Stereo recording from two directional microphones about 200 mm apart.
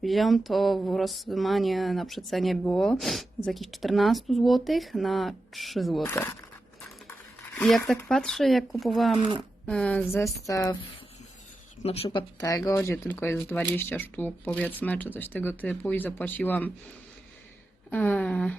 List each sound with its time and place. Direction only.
0.0 s speech: centre (ahead or behind)
7.5 s speech: 5° left (ahead or behind)
11.8 s speech: 30° left (ahead or behind)
12.0 s speech: 20° left (ahead or behind)
17.9 s speech: 10° left (ahead or behind)